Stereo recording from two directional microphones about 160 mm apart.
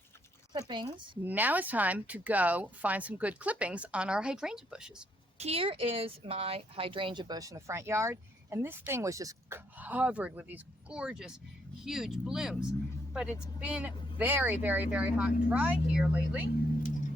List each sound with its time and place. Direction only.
0.7 s speech: 30° right (ahead or behind)
1.2 s speech: 10° right (ahead or behind)
5.4 s speech: 40° right (ahead or behind); by 16.4 s 10° right (ahead or behind)
16.5 s speech: 70° left (ahead or behind); by 17.1 s 55° left (ahead or behind)